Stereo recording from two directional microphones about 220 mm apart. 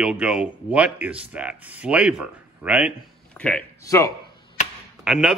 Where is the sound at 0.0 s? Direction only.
5° right (ahead or behind).